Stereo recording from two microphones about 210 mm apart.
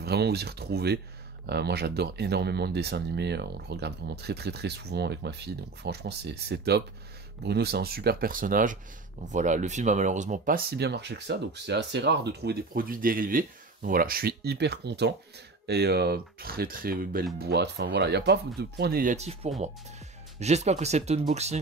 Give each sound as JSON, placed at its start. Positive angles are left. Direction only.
{"t": 0.0, "sound": "speech", "side_deg": -50}
{"t": 19.1, "sound": "speech", "side_deg": -30}